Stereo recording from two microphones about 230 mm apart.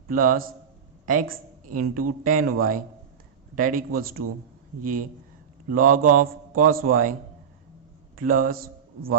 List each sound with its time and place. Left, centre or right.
0.1 s a man's voice: right
8.1 s a man's voice: right